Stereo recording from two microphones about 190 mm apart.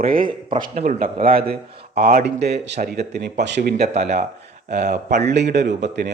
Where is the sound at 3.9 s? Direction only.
35° right (ahead or behind).